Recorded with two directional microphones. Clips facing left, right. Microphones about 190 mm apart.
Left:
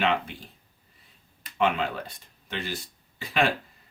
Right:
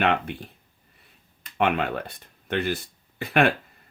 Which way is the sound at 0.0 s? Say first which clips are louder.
Right 2 dB; 60° right (ahead or behind).